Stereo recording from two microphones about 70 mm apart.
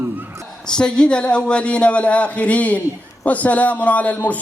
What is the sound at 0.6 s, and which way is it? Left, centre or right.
A man's voice, centre.